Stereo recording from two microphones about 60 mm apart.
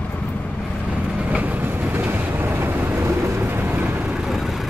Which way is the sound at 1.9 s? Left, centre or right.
Right.